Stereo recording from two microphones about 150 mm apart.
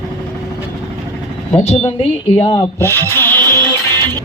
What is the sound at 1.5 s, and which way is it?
Speech, 45° left (ahead or behind).